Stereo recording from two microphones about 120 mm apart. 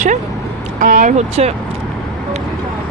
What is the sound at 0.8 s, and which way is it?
Speech, 90° right.